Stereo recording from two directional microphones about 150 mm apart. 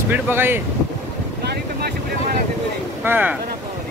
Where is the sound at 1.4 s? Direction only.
90° right.